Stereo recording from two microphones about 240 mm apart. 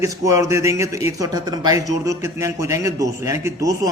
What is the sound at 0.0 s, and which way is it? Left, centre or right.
A man's voice, centre.